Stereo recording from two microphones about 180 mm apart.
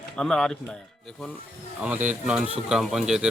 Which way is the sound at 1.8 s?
10° right (ahead or behind).